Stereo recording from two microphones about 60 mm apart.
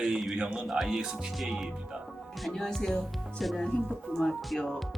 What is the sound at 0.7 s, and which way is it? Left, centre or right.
Speech, centre.